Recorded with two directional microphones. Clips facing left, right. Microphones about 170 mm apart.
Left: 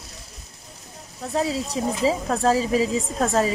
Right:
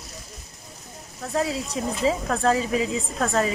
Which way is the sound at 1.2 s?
25° left (ahead or behind).